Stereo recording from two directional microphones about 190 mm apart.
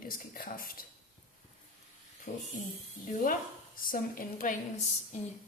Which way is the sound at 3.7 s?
50° left (ahead or behind).